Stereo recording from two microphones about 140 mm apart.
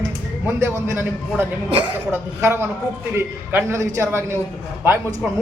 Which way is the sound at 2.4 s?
15° right (ahead or behind).